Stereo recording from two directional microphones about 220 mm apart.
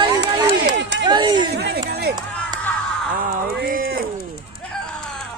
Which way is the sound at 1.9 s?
45° right (ahead or behind).